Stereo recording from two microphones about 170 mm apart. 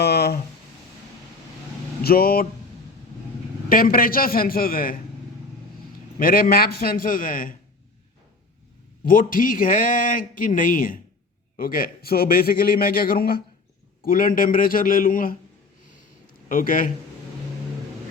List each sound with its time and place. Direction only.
0.0 s a sound: 70° left (ahead or behind)
2.0 s speech: 60° left (ahead or behind)
3.7 s a man's voice: 55° left (ahead or behind)
6.1 s a man's voice: 55° left (ahead or behind)
9.0 s a man's voice: 55° left (ahead or behind)
16.5 s speech: 55° left (ahead or behind)